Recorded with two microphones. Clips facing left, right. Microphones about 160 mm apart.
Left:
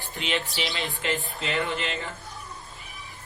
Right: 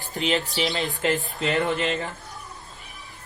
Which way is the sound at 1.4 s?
40° right (ahead or behind).